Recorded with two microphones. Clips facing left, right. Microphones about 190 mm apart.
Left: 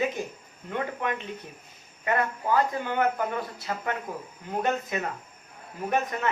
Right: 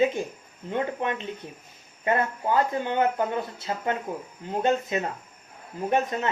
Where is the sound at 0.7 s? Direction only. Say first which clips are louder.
Right 3 dB; 25° right (ahead or behind).